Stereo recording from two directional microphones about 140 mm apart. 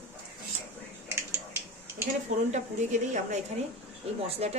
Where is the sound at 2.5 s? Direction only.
60° right (ahead or behind).